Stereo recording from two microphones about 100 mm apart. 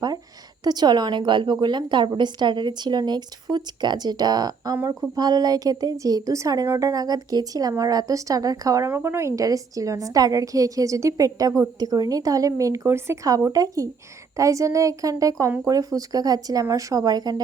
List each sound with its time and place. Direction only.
0.6 s a woman's voice: 45° right (ahead or behind)
8.9 s a woman's voice: 25° right (ahead or behind); by 17.4 s 40° right (ahead or behind)